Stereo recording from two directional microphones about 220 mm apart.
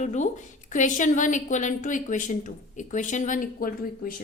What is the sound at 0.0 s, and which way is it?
A woman's voice, 35° left (ahead or behind).